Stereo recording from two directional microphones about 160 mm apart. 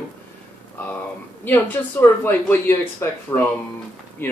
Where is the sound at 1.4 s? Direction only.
10° left (ahead or behind).